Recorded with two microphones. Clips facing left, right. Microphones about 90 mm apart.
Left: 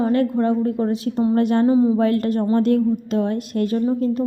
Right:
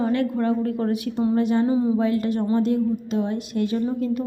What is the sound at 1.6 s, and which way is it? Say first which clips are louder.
Speech: left 5 dB; 30° left (ahead or behind).